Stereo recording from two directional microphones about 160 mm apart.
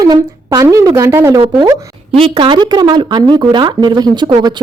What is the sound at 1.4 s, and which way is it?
Speech, 30° right (ahead or behind).